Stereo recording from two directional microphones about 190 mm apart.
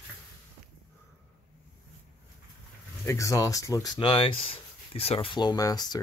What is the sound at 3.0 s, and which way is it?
Speech, 15° left (ahead or behind).